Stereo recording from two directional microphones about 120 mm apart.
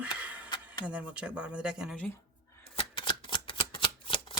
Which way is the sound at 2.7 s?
45° left (ahead or behind).